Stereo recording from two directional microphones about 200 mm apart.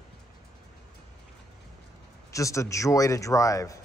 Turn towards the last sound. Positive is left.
turn(degrees=15)  # may be behind; listen again after turning